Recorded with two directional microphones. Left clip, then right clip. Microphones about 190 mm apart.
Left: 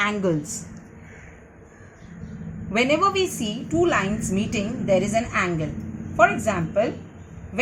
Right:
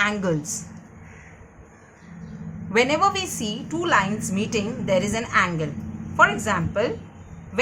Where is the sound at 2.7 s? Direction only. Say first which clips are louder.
Right 1 dB; 35° right (ahead or behind).